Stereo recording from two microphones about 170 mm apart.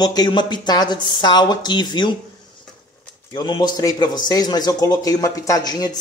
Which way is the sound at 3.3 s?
25° left (ahead or behind).